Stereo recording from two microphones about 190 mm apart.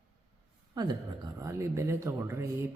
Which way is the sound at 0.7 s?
20° right (ahead or behind).